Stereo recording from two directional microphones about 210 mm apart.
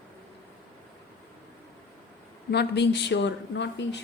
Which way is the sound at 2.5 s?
50° left (ahead or behind).